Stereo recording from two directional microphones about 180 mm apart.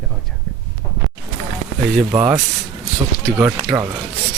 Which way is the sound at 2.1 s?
10° right (ahead or behind).